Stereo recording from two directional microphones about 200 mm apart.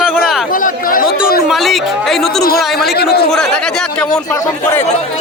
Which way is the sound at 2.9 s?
50° left (ahead or behind).